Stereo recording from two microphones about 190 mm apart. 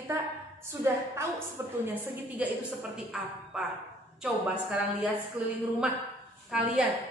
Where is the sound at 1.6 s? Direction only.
10° right (ahead or behind).